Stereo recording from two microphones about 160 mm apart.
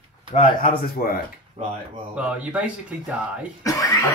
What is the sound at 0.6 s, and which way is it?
Speech, 60° left (ahead or behind).